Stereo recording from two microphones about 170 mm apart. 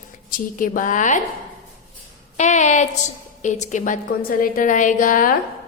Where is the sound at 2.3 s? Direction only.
45° left (ahead or behind).